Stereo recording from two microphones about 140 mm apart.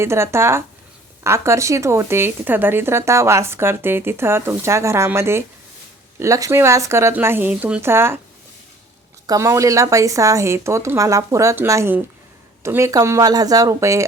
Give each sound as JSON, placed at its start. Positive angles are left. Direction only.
{"t": 0.0, "sound": "a woman's voice", "side_deg": -20}
{"t": 9.2, "sound": "speech", "side_deg": -25}